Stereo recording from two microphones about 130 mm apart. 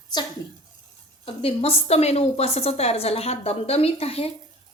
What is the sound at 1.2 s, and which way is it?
A woman's voice, 45° left (ahead or behind).